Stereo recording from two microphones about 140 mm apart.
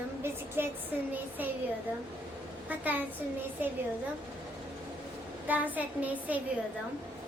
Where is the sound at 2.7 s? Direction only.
10° right (ahead or behind).